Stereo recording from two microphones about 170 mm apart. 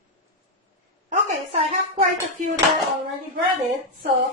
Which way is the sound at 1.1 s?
40° right (ahead or behind).